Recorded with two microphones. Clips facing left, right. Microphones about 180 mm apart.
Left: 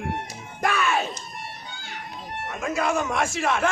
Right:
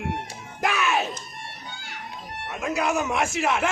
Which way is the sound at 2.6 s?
5° right (ahead or behind).